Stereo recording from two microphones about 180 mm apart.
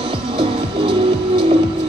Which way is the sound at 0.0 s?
30° right (ahead or behind).